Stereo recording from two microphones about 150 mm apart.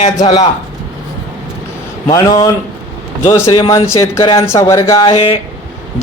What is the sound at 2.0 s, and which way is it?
Speech, 25° left (ahead or behind).